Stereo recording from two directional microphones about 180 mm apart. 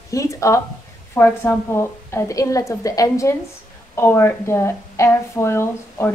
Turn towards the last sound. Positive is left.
turn(degrees=15)  # may be behind; listen again after turning